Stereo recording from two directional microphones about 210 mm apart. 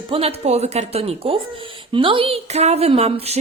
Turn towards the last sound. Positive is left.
turn(degrees=-30)  # may be behind; listen again after turning